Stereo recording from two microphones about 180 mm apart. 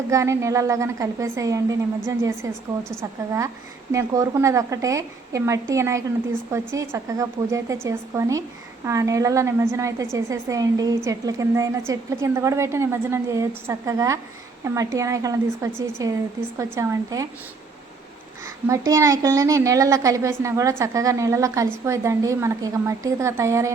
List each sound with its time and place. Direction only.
0.1 s speech: 15° right (ahead or behind)
18.7 s speech: 20° right (ahead or behind)